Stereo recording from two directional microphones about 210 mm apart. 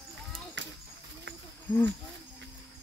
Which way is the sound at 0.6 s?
60° right (ahead or behind).